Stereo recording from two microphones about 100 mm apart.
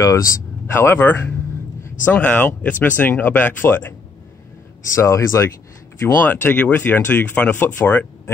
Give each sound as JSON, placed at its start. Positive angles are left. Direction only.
{"t": 0.0, "sound": "speech", "side_deg": 30}
{"t": 0.7, "sound": "speech", "side_deg": 20}
{"t": 5.0, "sound": "speech", "side_deg": 30}